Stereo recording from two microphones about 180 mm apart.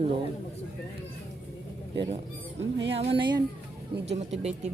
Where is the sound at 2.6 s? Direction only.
80° right.